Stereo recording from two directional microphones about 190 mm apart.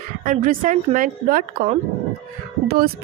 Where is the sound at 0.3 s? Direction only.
45° right (ahead or behind).